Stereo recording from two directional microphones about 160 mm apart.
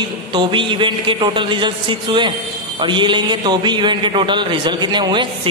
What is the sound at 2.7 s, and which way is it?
A man's voice, 30° right (ahead or behind).